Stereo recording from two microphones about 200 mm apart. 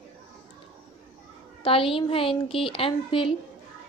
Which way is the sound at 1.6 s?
25° left (ahead or behind).